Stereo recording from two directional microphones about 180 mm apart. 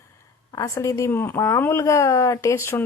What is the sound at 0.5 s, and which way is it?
Speech, 15° left (ahead or behind).